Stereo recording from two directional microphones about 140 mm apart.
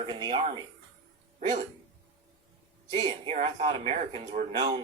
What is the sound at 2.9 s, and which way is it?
Speech, 50° right (ahead or behind).